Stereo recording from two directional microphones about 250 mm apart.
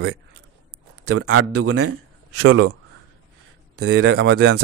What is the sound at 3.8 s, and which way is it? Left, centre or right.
Speech, right.